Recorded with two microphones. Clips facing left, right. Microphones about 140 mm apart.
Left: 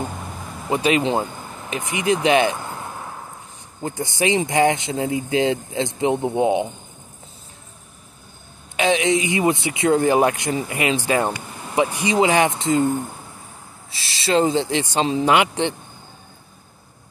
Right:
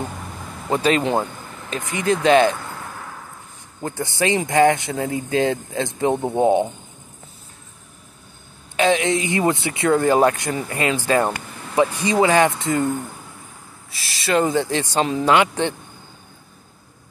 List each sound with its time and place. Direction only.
0.7 s speech: 15° left (ahead or behind)
1.7 s a sound: 15° left (ahead or behind)
3.8 s speech: 20° left (ahead or behind)
8.7 s speech: 15° left (ahead or behind)